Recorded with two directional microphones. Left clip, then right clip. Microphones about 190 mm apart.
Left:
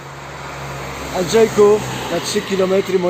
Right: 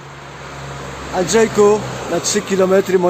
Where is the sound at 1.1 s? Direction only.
40° right (ahead or behind).